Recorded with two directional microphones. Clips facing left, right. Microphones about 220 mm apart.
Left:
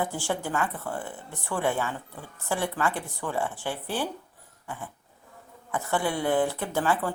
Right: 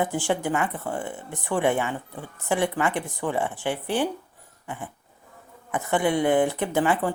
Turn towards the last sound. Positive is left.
turn(degrees=-20)  # may be behind; listen again after turning